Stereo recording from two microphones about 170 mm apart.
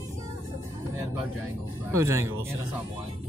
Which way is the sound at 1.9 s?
15° right (ahead or behind).